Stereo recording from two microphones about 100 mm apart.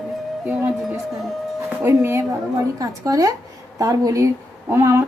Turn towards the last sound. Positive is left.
turn(degrees=-25)  # may be behind; listen again after turning